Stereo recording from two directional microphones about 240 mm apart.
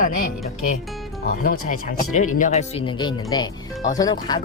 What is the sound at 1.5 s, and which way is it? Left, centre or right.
Speech, left.